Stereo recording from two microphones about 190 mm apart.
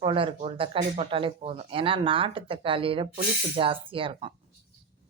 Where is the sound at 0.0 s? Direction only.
25° right (ahead or behind).